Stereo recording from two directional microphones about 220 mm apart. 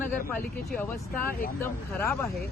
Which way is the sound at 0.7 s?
10° left (ahead or behind).